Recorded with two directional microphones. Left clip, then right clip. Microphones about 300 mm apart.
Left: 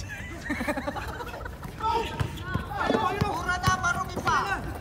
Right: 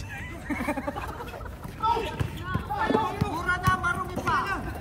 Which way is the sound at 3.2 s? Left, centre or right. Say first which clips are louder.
Even; centre.